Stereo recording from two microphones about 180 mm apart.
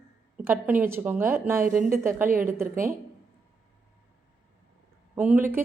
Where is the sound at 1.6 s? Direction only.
50° right (ahead or behind).